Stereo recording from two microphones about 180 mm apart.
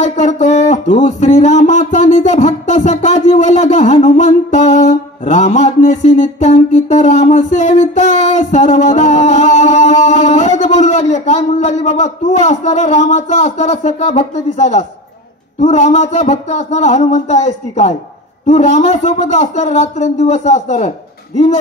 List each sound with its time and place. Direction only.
0.0 s speech: 40° left (ahead or behind)